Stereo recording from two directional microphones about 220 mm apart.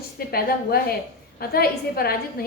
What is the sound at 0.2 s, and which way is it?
A woman's voice, 45° left (ahead or behind).